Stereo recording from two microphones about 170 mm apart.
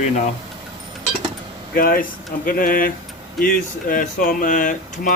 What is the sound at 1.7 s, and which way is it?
Speech, 60° left (ahead or behind).